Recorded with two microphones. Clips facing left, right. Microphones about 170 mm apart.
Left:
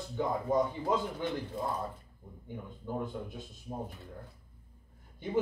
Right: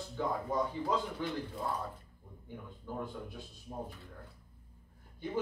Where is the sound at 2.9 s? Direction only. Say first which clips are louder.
Left 4 dB; 20° left (ahead or behind).